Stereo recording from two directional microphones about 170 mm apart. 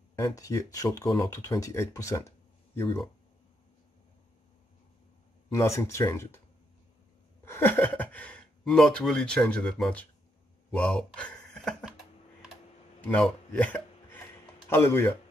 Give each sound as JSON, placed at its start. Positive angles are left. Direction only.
{"t": 0.1, "sound": "speech", "side_deg": 20}
{"t": 5.5, "sound": "speech", "side_deg": 15}
{"t": 7.4, "sound": "speech", "side_deg": 15}
{"t": 13.0, "sound": "a sound", "side_deg": 10}
{"t": 14.7, "sound": "speech", "side_deg": 15}